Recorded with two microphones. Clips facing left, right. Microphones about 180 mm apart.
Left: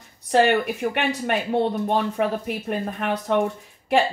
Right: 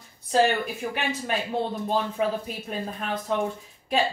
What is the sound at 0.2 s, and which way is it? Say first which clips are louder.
Speech: left 4 dB; 70° left (ahead or behind).